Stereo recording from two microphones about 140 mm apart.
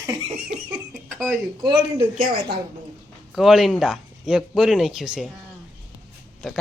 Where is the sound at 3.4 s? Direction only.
Centre (ahead or behind).